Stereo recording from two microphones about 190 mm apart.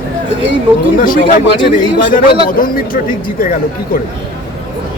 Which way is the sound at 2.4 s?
50° left (ahead or behind).